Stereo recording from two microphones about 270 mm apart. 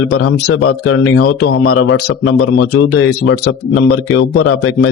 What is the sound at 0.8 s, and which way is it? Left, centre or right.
A man's voice, left.